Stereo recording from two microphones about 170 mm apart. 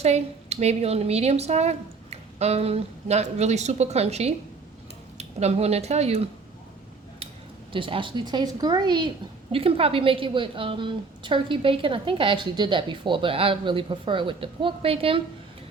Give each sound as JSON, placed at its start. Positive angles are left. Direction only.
{"t": 0.0, "sound": "a woman's voice", "side_deg": -40}
{"t": 7.7, "sound": "a woman's voice", "side_deg": -30}